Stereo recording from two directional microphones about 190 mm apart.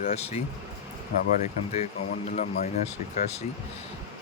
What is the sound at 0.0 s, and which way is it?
Speech, 35° left (ahead or behind).